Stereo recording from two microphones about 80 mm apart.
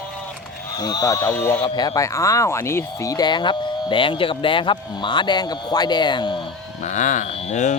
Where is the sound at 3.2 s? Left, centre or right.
Left.